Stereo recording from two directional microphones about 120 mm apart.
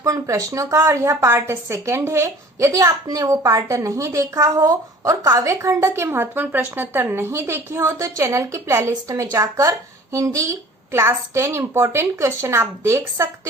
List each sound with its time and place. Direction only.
0.0 s a woman's voice: 25° right (ahead or behind)